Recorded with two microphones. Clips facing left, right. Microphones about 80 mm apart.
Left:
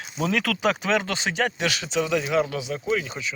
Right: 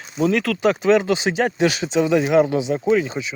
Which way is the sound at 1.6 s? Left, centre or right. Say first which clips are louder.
Right 7 dB; right.